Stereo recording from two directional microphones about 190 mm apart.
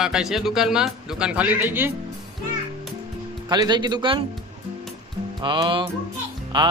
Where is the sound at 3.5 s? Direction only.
20° right (ahead or behind).